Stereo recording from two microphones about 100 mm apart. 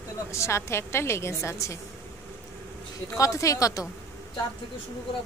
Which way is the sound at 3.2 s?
35° left (ahead or behind).